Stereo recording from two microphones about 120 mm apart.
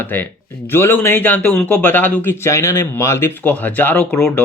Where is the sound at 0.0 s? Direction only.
15° left (ahead or behind).